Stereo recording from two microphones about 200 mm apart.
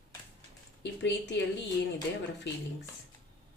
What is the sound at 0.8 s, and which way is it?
Speech, 60° left (ahead or behind).